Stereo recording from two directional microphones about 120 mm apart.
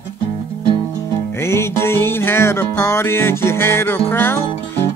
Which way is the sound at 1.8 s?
20° left (ahead or behind).